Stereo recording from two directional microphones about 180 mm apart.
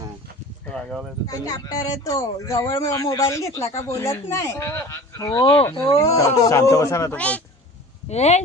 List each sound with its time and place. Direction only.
0.7 s speech: centre (ahead or behind)
1.3 s speech: 20° left (ahead or behind)
5.9 s speech: 15° left (ahead or behind)
8.1 s speech: 35° left (ahead or behind)